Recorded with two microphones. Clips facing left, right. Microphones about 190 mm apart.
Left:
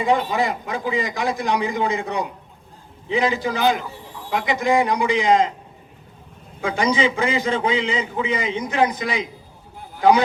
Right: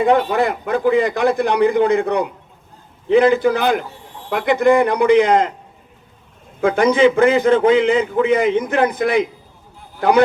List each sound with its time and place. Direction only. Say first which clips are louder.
0.0 s a man's voice: right 5 dB; 60° right (ahead or behind)
6.6 s a man's voice: right 7 dB; 55° right (ahead or behind)